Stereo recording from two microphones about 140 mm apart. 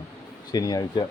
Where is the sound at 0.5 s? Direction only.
25° left (ahead or behind).